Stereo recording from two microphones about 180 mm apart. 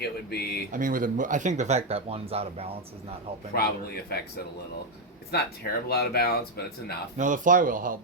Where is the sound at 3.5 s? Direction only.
60° left (ahead or behind).